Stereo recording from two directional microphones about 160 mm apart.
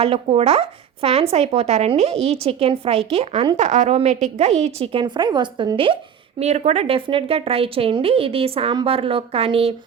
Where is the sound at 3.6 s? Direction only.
45° right (ahead or behind).